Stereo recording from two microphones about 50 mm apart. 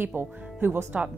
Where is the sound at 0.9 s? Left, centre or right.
Right.